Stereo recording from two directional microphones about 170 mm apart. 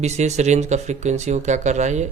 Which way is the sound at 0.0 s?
40° right (ahead or behind).